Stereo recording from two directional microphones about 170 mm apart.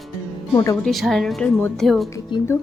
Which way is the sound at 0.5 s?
20° left (ahead or behind).